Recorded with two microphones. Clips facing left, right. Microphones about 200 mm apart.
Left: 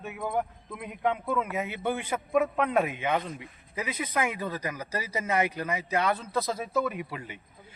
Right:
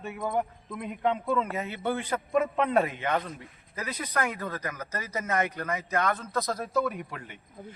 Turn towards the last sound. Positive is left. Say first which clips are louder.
# even
turn(degrees=5)  # may be behind; listen again after turning